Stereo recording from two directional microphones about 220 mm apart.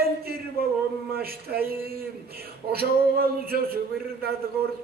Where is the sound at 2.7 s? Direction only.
45° right (ahead or behind).